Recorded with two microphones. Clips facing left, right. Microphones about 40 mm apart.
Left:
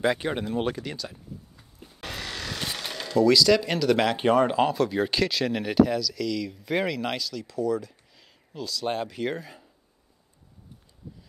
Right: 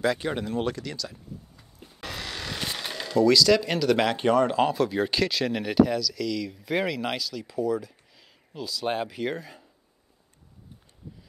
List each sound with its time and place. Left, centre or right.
0.0 s speech: centre
1.8 s a sound: centre
4.2 s speech: centre
4.6 s speech: centre